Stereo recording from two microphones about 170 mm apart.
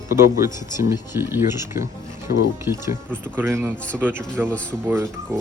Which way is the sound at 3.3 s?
15° right (ahead or behind).